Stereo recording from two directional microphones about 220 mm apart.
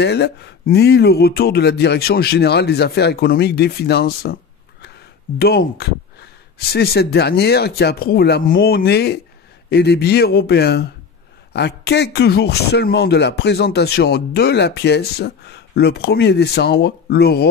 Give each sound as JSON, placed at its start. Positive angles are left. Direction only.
{"t": 0.0, "sound": "speech", "side_deg": 50}
{"t": 5.4, "sound": "speech", "side_deg": 45}